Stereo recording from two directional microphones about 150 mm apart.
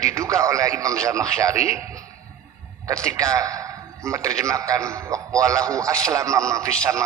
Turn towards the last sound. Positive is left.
turn(degrees=-20)  # may be behind; listen again after turning